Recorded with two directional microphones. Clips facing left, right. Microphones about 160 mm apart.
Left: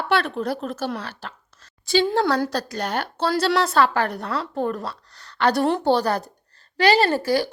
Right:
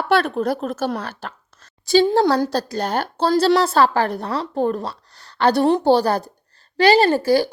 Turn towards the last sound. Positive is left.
turn(degrees=-30)  # may be behind; listen again after turning